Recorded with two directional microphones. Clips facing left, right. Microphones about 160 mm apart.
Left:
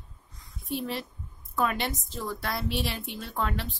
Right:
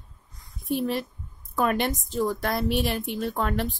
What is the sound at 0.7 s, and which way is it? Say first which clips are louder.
A woman's voice: right 6 dB; 50° right (ahead or behind).